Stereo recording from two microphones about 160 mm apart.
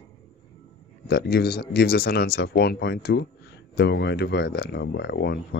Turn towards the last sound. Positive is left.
turn(degrees=90)